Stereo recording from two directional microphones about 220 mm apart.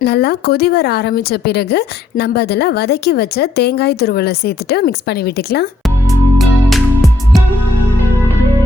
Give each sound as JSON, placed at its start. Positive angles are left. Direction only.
{"t": 0.0, "sound": "speech", "side_deg": 45}
{"t": 6.4, "sound": "music", "side_deg": 0}